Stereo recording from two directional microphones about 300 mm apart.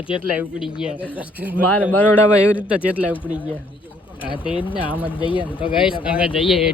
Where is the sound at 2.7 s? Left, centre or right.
Centre.